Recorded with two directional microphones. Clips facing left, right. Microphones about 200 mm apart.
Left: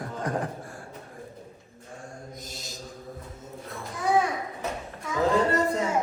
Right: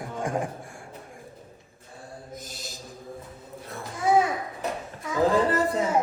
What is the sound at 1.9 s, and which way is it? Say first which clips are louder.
Mantra: left 1 dB; 35° right (ahead or behind).